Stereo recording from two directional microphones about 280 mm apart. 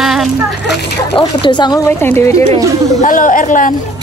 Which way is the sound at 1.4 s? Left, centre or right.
Centre.